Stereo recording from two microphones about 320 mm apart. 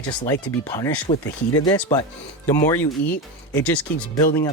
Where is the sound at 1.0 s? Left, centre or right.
Centre.